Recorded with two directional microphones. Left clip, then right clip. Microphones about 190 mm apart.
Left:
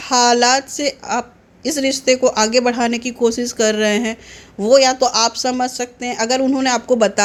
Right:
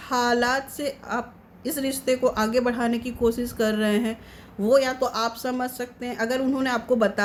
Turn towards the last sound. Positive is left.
turn(degrees=25)  # may be behind; listen again after turning